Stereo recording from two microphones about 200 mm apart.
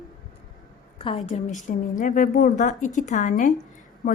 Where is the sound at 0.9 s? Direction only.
30° left (ahead or behind).